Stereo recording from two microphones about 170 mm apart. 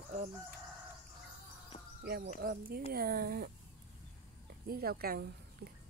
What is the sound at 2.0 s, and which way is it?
Speech, 70° right (ahead or behind).